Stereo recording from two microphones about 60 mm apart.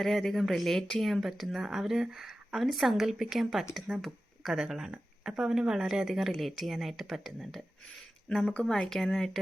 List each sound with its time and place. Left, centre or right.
0.0 s a woman's voice: centre